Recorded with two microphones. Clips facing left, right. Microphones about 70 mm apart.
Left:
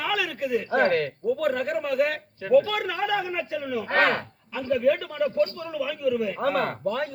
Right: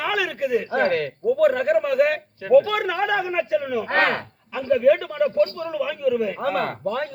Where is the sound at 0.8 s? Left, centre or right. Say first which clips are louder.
Left 1 dB; left.